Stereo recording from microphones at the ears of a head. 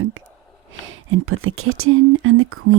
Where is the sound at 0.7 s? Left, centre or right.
Right.